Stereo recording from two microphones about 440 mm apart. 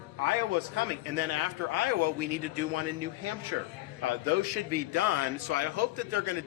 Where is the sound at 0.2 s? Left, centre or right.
Right.